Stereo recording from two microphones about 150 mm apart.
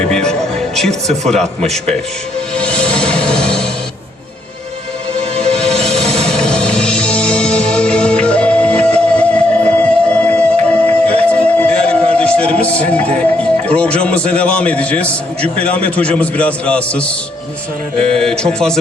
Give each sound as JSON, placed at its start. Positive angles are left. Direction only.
{"t": 0.0, "sound": "speech", "side_deg": 5}
{"t": 2.6, "sound": "music", "side_deg": 5}
{"t": 5.4, "sound": "music", "side_deg": 5}
{"t": 13.1, "sound": "a man's voice", "side_deg": 10}